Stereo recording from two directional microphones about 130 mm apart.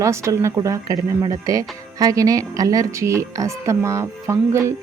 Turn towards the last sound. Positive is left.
turn(degrees=-20)  # may be behind; listen again after turning